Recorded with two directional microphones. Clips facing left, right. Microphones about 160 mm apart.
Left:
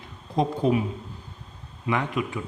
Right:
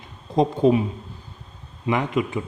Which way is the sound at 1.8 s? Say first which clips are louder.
Right 4 dB; 20° right (ahead or behind).